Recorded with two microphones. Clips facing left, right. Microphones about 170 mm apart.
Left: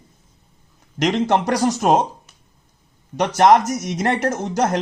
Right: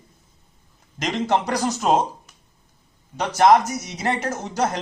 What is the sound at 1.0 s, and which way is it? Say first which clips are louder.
Speech: left 4 dB; 55° left (ahead or behind).